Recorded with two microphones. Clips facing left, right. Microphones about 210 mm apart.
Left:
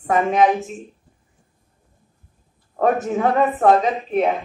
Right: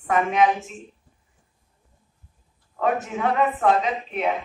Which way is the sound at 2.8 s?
40° left (ahead or behind).